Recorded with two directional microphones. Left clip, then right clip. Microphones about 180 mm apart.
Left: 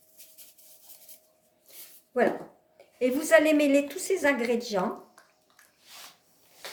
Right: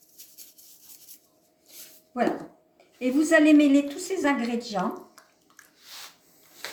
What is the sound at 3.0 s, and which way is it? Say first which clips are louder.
Speech: right 1 dB; 50° left (ahead or behind).